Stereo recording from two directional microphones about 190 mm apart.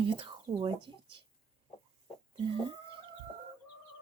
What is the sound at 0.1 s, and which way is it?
Speech, 25° right (ahead or behind).